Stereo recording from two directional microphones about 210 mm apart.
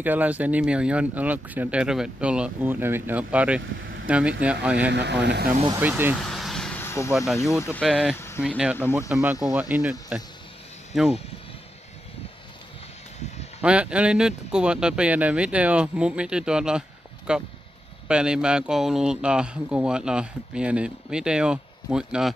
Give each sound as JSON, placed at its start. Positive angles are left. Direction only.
{"t": 0.0, "sound": "speech", "side_deg": -10}
{"t": 4.9, "sound": "speech", "side_deg": -55}
{"t": 5.7, "sound": "speech", "side_deg": -10}
{"t": 6.1, "sound": "vehicle", "side_deg": 0}
{"t": 7.1, "sound": "speech", "side_deg": 0}
{"t": 13.6, "sound": "speech", "side_deg": -5}